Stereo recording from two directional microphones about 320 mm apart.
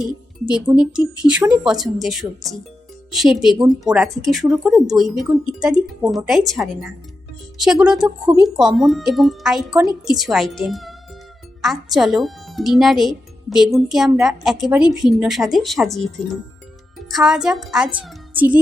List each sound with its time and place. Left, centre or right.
0.4 s speech: centre